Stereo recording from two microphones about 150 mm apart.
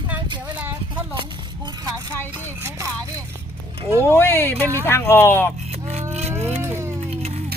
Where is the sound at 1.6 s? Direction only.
25° right (ahead or behind).